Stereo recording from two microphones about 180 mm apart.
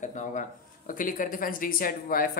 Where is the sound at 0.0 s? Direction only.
45° left (ahead or behind).